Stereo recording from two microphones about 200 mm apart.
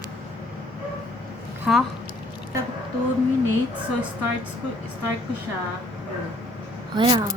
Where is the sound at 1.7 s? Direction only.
5° right (ahead or behind).